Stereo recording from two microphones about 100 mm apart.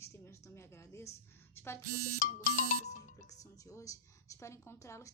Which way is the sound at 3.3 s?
35° left (ahead or behind).